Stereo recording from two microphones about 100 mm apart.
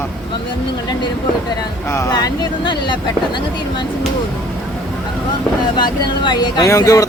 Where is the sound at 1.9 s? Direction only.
30° left (ahead or behind).